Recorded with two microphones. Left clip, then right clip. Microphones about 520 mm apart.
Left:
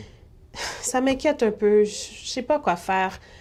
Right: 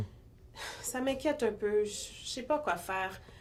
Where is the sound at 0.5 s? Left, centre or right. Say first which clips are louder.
Left 13 dB; left.